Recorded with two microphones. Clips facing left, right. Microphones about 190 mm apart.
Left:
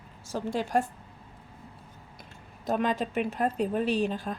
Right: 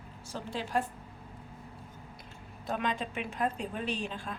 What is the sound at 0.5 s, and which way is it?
Speech, 45° left (ahead or behind).